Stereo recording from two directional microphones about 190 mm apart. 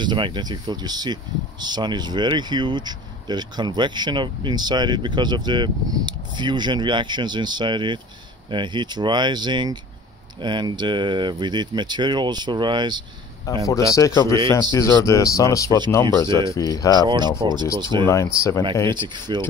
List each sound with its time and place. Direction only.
0.0 s speech: 25° right (ahead or behind)
13.5 s speech: 20° left (ahead or behind)
17.0 s speech: 20° right (ahead or behind)
18.0 s speech: 15° left (ahead or behind)
18.9 s speech: 25° right (ahead or behind)